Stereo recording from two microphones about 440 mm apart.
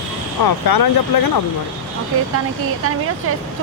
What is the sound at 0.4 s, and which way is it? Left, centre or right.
Speech, left.